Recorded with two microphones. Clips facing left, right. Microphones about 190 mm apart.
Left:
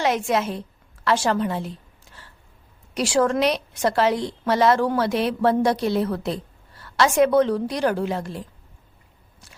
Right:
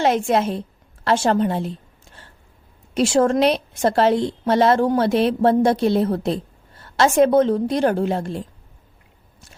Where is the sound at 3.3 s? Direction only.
30° right (ahead or behind).